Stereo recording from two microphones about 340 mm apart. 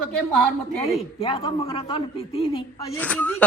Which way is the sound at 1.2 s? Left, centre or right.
Centre.